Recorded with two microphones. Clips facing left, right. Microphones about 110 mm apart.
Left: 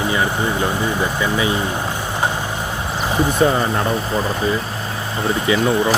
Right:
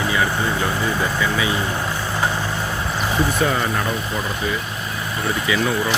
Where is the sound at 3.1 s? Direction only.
30° left (ahead or behind).